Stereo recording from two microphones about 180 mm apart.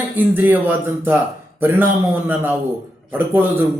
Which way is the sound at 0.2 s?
10° right (ahead or behind).